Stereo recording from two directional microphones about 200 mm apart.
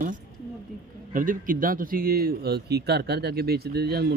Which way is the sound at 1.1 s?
45° right (ahead or behind).